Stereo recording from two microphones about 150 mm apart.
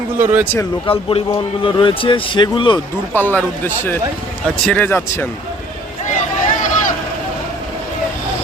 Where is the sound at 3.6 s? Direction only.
15° left (ahead or behind).